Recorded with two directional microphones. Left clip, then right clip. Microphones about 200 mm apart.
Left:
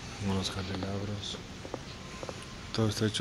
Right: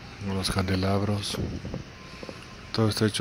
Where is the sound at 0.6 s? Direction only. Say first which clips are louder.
Right 10 dB; 40° right (ahead or behind).